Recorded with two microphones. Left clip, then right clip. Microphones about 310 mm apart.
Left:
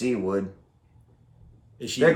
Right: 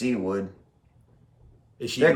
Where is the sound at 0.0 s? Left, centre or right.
Centre.